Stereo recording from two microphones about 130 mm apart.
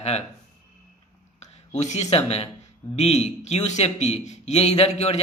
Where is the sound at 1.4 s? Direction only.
60° left (ahead or behind).